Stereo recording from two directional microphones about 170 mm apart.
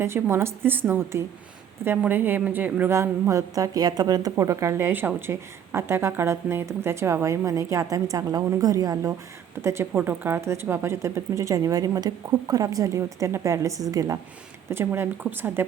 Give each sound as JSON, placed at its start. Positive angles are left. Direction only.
{"t": 0.0, "sound": "a woman's voice", "side_deg": -15}